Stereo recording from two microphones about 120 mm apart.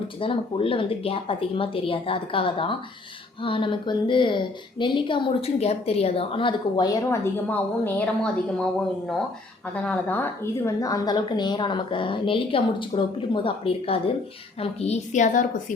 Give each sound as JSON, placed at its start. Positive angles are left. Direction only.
{"t": 0.2, "sound": "speech", "side_deg": 50}
{"t": 5.5, "sound": "a woman's voice", "side_deg": 60}
{"t": 6.8, "sound": "a woman's voice", "side_deg": 30}
{"t": 7.5, "sound": "a woman's voice", "side_deg": 15}
{"t": 9.7, "sound": "a woman's voice", "side_deg": 10}